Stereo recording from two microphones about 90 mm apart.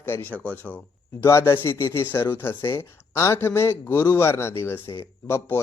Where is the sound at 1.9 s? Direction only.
25° left (ahead or behind).